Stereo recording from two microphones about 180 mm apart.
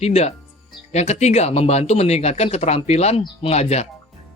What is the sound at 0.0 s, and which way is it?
Speech, 35° left (ahead or behind).